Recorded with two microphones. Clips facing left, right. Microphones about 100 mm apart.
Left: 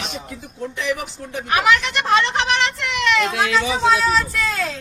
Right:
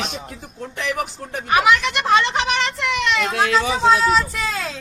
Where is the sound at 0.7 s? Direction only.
50° right (ahead or behind).